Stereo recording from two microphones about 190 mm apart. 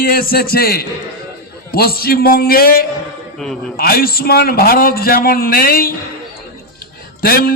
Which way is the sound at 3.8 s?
50° left (ahead or behind).